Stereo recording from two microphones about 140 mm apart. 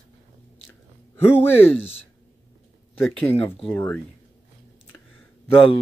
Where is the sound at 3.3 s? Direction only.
15° left (ahead or behind).